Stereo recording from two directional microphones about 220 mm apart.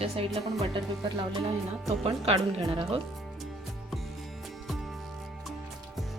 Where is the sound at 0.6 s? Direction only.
20° right (ahead or behind).